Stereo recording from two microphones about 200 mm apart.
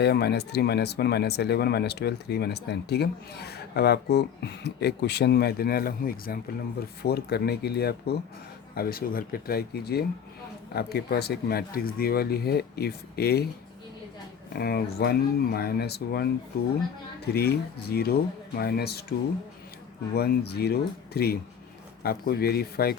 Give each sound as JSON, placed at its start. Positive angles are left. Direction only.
{"t": 0.0, "sound": "speech", "side_deg": 55}
{"t": 14.5, "sound": "speech", "side_deg": 50}
{"t": 17.3, "sound": "speech", "side_deg": 50}
{"t": 20.1, "sound": "speech", "side_deg": 50}